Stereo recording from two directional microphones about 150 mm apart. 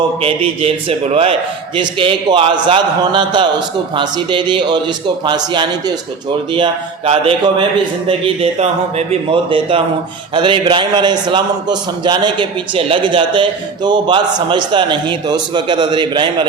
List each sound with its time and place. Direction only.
0.2 s a man's voice: 40° right (ahead or behind)